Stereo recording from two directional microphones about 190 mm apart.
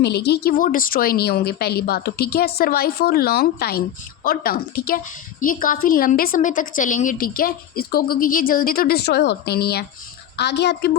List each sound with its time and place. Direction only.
0.0 s a woman's voice: 60° left (ahead or behind)